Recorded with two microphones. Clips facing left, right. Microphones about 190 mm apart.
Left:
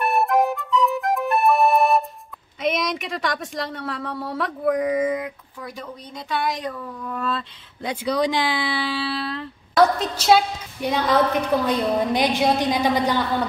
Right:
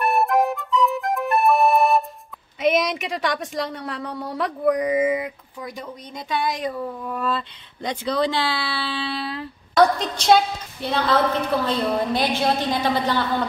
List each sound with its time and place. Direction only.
0.0 s music: centre (ahead or behind)
2.6 s a woman's voice: centre (ahead or behind)
5.2 s speech: 20° right (ahead or behind)
7.1 s a woman's voice: 5° right (ahead or behind)
7.9 s speech: 10° left (ahead or behind)